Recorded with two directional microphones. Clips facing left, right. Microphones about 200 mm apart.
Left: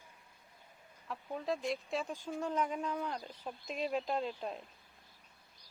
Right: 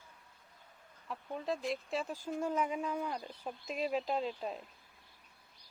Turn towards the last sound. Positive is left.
turn(degrees=0)  # may be behind; listen again after turning